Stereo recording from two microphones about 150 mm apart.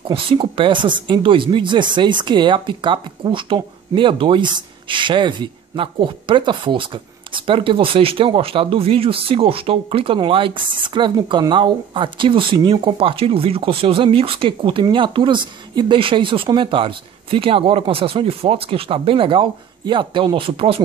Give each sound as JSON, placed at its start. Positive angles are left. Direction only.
{"t": 0.1, "sound": "speech", "side_deg": -35}